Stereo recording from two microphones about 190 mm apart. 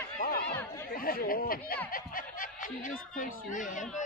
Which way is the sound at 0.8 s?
50° left (ahead or behind).